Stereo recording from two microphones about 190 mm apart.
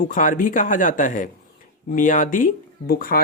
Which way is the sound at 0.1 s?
45° left (ahead or behind).